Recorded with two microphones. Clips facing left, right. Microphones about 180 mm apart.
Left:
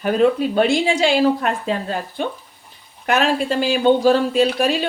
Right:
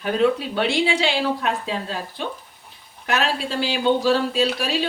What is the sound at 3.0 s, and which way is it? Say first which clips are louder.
Speech: left 5 dB; 50° left (ahead or behind).